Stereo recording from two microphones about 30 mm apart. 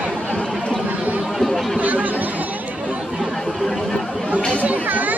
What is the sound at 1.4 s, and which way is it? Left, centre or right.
Chatter, centre.